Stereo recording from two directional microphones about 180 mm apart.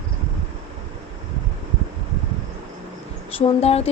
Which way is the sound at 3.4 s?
35° left (ahead or behind).